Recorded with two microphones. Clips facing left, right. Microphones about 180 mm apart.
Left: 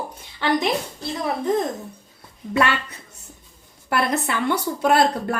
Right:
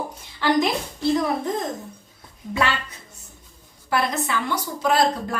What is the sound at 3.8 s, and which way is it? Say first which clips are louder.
A woman's voice: left 1 dB; 60° left (ahead or behind).